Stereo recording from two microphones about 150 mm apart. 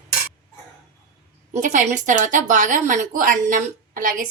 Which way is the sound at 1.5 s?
55° right (ahead or behind).